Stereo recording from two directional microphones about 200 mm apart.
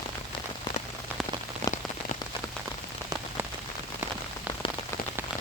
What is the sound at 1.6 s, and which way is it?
Rain on surface, 30° left (ahead or behind).